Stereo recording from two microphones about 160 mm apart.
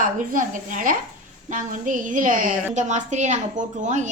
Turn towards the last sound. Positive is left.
turn(degrees=-50)  # may be behind; listen again after turning